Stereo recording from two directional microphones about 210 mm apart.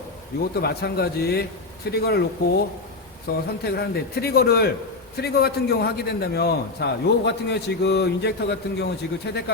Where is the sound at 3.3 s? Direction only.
45° left (ahead or behind).